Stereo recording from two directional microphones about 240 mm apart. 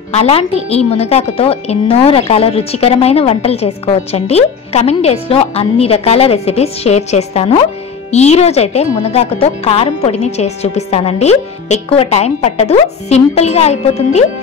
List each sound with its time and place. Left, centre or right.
0.1 s a woman's voice: left